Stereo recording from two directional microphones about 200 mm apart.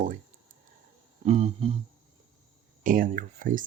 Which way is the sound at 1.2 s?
30° right (ahead or behind).